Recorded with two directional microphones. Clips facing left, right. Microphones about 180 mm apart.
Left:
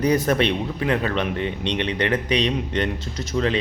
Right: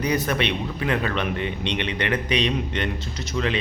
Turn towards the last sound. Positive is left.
turn(degrees=35)  # may be behind; listen again after turning